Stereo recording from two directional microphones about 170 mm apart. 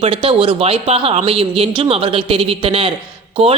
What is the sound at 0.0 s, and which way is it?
A woman's voice, 35° right (ahead or behind).